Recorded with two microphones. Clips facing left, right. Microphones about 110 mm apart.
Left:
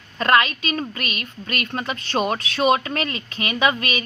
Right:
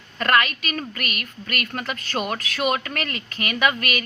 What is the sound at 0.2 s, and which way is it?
A woman's voice, 25° left (ahead or behind).